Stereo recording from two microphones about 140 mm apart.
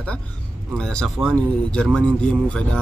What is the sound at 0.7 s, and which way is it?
Speech, 5° left (ahead or behind).